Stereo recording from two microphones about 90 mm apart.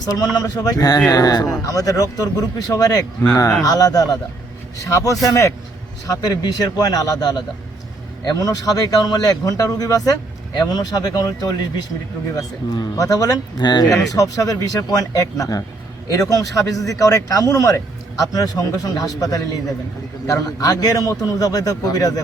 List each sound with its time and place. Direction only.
0.0 s speech: 45° left (ahead or behind)